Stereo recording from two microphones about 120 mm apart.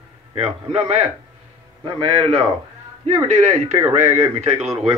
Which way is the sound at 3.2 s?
70° right (ahead or behind).